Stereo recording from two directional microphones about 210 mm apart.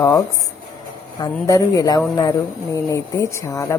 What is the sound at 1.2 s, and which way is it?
A woman's voice, 15° left (ahead or behind).